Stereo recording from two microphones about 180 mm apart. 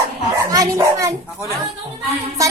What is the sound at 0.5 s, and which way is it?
Speech, 20° right (ahead or behind).